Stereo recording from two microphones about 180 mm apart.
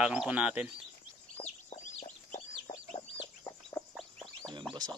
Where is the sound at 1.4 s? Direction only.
40° left (ahead or behind).